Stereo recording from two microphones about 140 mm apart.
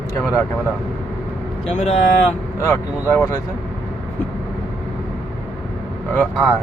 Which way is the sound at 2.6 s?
20° left (ahead or behind).